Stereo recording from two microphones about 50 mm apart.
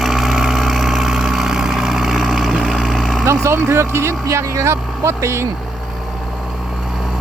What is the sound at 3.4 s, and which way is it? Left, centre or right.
Speech, right.